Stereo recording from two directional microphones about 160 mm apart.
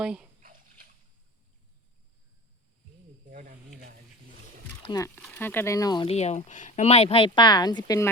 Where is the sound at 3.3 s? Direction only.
55° right (ahead or behind).